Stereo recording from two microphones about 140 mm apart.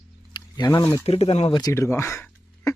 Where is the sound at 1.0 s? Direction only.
45° left (ahead or behind).